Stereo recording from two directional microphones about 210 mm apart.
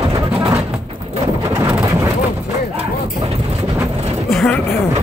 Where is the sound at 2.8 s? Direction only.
30° right (ahead or behind).